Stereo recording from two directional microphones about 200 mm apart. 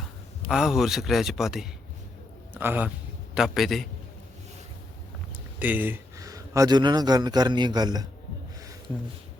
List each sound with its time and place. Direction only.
0.4 s a man's voice: centre (ahead or behind)
5.5 s speech: 10° right (ahead or behind)